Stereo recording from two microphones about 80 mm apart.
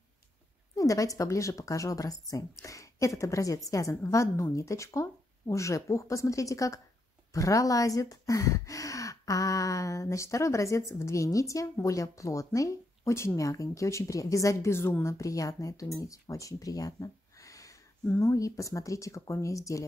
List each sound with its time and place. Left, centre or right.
0.7 s speech: left